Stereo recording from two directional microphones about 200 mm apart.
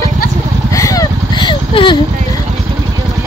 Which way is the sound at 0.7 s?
15° left (ahead or behind).